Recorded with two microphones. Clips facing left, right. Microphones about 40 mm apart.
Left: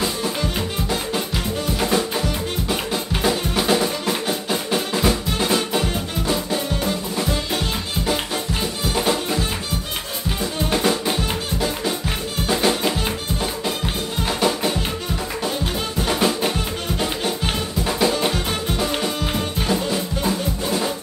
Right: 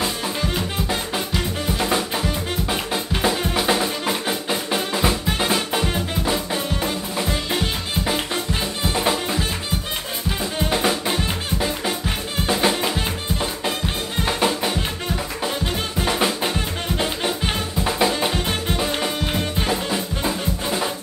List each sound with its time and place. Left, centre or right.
0.8 s music: centre
3.2 s drum kit: centre
4.3 s music: centre
9.0 s music: centre
10.7 s music: centre
12.4 s music: centre
14.2 s music: centre
19.3 s music: centre